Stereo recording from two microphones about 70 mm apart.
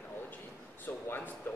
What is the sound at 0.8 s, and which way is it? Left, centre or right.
Speech, left.